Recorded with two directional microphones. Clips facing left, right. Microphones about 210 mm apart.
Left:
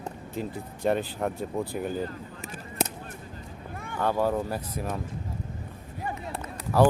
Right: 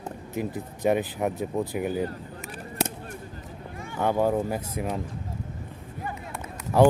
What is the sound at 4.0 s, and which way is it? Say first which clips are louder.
Speech: right 2 dB; 15° right (ahead or behind).